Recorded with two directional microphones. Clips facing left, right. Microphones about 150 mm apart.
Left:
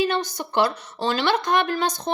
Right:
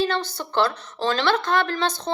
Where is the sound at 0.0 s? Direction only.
15° left (ahead or behind).